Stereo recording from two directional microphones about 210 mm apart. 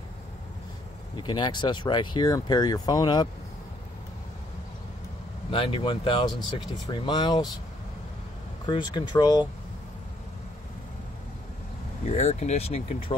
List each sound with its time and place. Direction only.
1.1 s speech: 20° left (ahead or behind)
5.5 s speech: 25° left (ahead or behind)
8.6 s speech: 20° left (ahead or behind)
12.1 s speech: 30° left (ahead or behind)